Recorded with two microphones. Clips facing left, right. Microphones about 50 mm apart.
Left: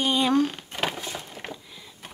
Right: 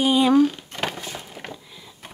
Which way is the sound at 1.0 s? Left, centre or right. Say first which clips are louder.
Right 1 dB; centre.